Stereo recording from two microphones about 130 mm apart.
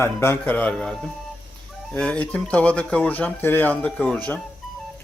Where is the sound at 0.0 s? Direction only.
20° left (ahead or behind).